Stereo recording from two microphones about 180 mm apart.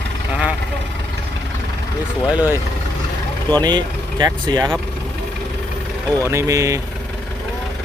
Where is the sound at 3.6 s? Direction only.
25° right (ahead or behind).